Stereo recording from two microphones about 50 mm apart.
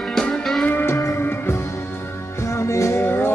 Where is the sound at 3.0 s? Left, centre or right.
Left.